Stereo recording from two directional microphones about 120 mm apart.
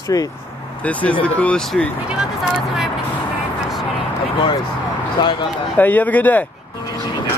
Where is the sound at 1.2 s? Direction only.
10° left (ahead or behind).